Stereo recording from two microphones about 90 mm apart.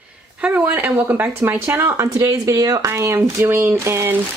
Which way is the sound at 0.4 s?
15° right (ahead or behind).